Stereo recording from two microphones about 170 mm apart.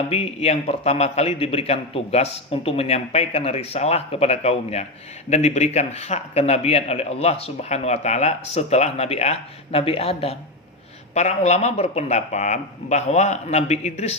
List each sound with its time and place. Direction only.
0.1 s a man's voice: 40° left (ahead or behind)